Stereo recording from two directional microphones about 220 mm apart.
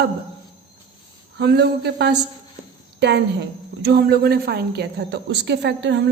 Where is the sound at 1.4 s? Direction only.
50° right (ahead or behind).